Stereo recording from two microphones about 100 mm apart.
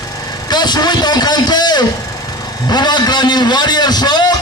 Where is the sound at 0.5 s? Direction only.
45° left (ahead or behind).